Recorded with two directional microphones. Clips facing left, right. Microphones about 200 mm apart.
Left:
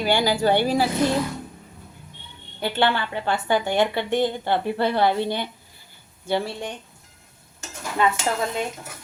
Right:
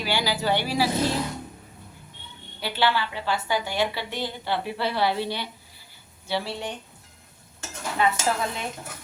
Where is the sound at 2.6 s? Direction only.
55° left (ahead or behind).